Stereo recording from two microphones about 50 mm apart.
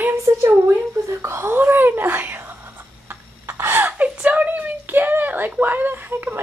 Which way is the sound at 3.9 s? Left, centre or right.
Right.